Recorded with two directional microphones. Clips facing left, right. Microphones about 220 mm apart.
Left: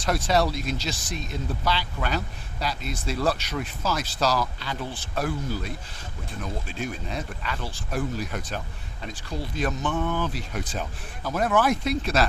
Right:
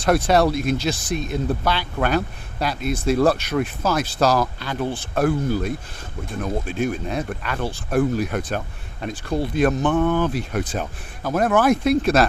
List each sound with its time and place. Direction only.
0.0 s speech: 55° right (ahead or behind)